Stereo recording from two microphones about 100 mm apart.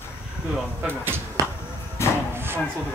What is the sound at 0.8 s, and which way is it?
Speech, 20° right (ahead or behind).